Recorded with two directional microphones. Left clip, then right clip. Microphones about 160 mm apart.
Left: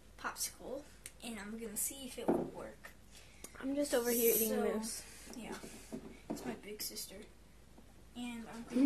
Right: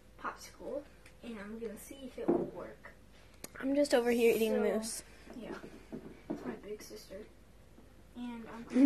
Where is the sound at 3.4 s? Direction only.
10° right (ahead or behind).